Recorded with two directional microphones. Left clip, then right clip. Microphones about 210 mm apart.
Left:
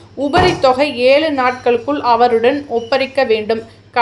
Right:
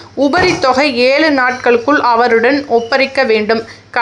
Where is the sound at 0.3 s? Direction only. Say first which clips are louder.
Even; 20° right (ahead or behind).